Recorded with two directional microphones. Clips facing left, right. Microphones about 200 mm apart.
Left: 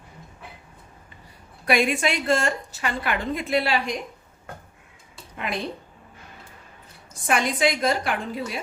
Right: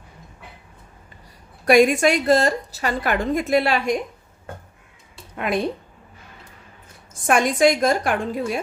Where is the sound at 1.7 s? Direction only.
45° right (ahead or behind).